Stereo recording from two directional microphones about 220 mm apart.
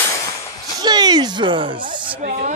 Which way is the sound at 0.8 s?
20° right (ahead or behind).